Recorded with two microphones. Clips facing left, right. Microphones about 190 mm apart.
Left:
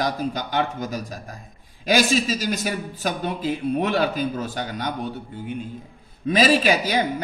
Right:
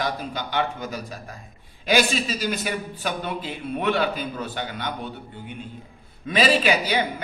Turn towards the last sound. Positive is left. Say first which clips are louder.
# left 2 dB
turn(degrees=40)  # may be behind; listen again after turning